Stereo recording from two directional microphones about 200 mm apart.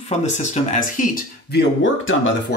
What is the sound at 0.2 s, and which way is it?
Speech, 35° left (ahead or behind).